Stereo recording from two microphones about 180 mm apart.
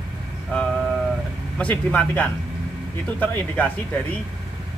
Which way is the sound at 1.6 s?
5° left (ahead or behind).